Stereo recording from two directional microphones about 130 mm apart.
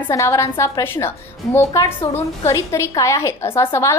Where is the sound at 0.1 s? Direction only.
25° left (ahead or behind).